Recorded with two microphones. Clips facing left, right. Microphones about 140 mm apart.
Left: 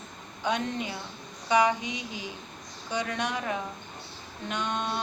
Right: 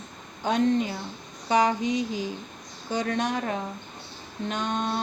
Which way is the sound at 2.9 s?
40° right (ahead or behind).